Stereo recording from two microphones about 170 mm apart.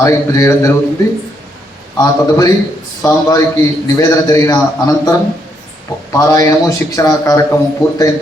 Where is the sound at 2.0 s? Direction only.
20° left (ahead or behind).